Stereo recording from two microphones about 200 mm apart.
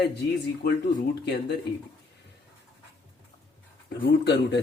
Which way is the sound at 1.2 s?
55° left (ahead or behind).